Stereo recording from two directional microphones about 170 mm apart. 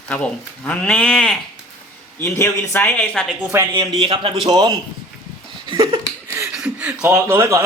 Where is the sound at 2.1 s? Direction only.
15° left (ahead or behind).